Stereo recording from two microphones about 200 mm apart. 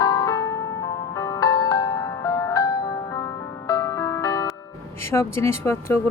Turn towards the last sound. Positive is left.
turn(degrees=15)  # may be behind; listen again after turning